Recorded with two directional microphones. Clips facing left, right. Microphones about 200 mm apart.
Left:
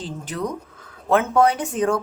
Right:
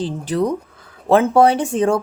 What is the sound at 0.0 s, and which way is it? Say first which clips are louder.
Speech: right 8 dB; 35° right (ahead or behind).